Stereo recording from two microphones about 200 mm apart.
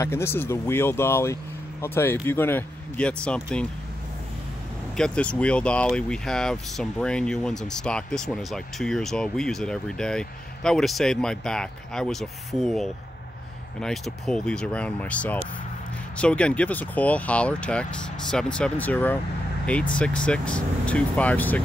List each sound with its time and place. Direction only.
0.0 s speech: 10° left (ahead or behind)
4.9 s speech: 5° left (ahead or behind)